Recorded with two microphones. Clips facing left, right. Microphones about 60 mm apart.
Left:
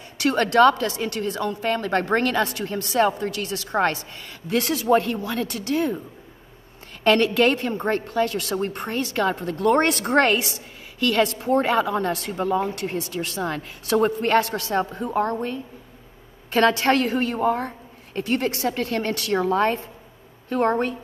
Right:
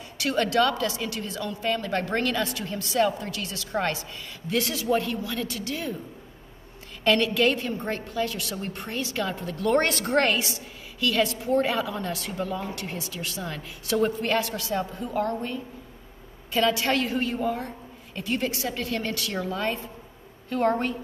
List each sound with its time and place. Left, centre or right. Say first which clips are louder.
0.2 s a woman's voice: left 6 dB; left
7.0 s a woman's voice: left 4 dB; left
9.7 s a woman's voice: left 4 dB; left
16.5 s a woman's voice: left 5 dB; left